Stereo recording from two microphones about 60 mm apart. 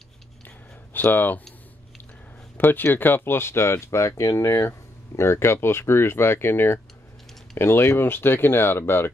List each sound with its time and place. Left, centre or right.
0.9 s speech: left
2.5 s speech: left